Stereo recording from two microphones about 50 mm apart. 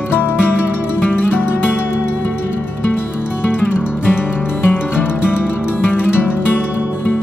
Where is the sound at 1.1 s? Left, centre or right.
Left.